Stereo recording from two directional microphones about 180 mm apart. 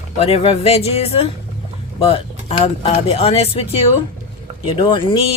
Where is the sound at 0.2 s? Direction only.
35° left (ahead or behind).